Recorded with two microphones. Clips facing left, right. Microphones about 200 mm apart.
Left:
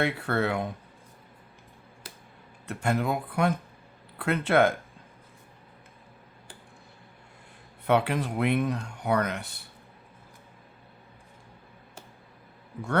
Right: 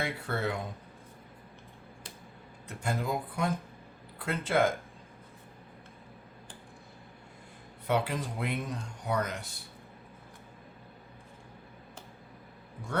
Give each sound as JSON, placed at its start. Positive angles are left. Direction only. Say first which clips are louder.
{"t": 0.0, "sound": "speech", "louder": "left 6 dB", "side_deg": 70}
{"t": 2.6, "sound": "speech", "louder": "left 6 dB", "side_deg": 65}
{"t": 7.9, "sound": "speech", "louder": "left 5 dB", "side_deg": 65}